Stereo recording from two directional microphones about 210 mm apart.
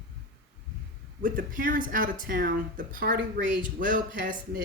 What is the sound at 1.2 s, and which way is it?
Speech, 40° right (ahead or behind).